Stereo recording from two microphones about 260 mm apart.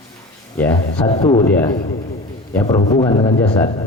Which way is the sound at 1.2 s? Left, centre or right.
Centre.